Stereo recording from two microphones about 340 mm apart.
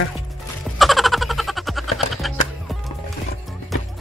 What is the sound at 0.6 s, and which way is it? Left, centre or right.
Music, centre.